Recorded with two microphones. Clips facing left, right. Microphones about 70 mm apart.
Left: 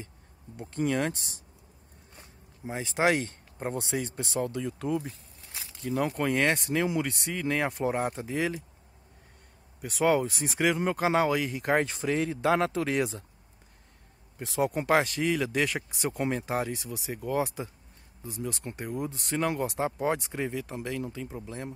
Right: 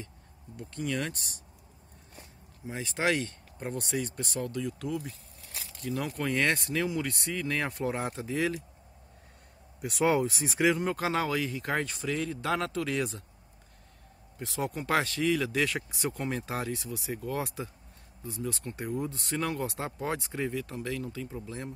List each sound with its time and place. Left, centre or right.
0.6 s speech: left
2.6 s speech: left
5.8 s speech: centre
6.2 s speech: centre
6.7 s speech: centre
9.8 s speech: centre; by 13.2 s left
14.4 s speech: centre